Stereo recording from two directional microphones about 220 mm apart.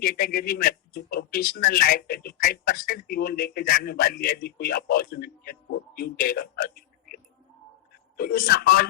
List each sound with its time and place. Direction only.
0.0 s a man's voice: 40° left (ahead or behind)